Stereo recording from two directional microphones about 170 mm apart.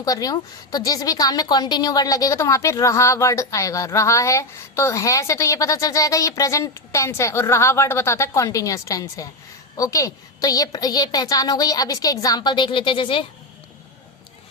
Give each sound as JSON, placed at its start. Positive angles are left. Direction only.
{"t": 0.0, "sound": "a woman's voice", "side_deg": 20}